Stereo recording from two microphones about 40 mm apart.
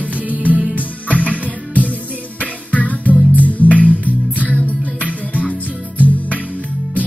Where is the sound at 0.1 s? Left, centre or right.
Right.